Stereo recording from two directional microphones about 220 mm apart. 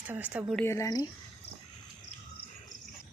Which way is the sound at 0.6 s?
10° left (ahead or behind).